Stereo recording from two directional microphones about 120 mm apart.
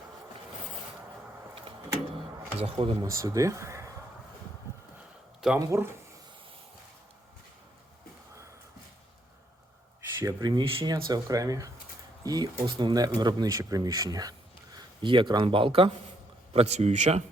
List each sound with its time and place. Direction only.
2.6 s speech: 55° right (ahead or behind)
3.0 s speech: 30° right (ahead or behind)
5.5 s speech: 20° right (ahead or behind)
10.2 s speech: 35° right (ahead or behind)
10.9 s speech: 30° right (ahead or behind); by 15.9 s 50° right (ahead or behind)
16.5 s speech: 60° right (ahead or behind)